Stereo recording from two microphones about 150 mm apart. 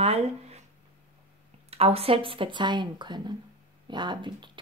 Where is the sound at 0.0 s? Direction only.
45° right (ahead or behind).